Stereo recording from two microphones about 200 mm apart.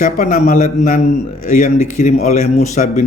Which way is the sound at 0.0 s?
40° left (ahead or behind).